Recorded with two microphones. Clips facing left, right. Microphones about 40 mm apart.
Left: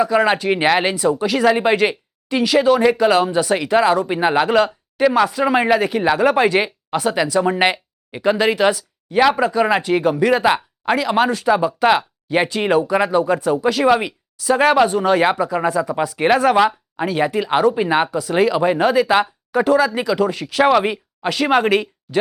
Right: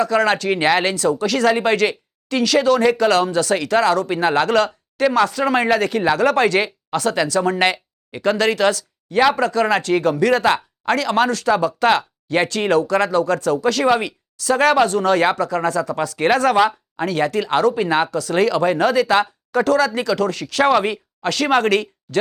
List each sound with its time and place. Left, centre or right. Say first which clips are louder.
0.0 s speech: left 1 dB; centre